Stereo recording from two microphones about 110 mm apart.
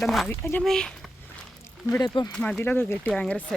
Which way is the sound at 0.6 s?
5° left (ahead or behind).